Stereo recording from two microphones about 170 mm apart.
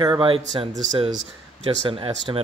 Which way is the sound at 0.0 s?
25° right (ahead or behind).